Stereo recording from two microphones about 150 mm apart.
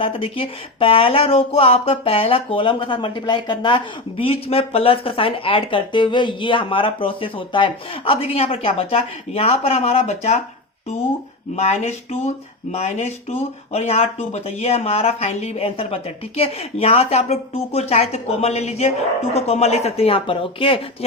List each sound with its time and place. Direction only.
0.0 s speech: 35° left (ahead or behind)
11.5 s speech: 45° left (ahead or behind)